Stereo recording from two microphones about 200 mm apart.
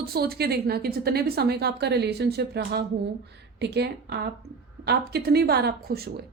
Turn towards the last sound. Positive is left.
turn(degrees=-50)  # may be behind; listen again after turning